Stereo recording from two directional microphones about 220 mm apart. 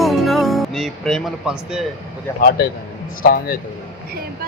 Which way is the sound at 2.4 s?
45° left (ahead or behind).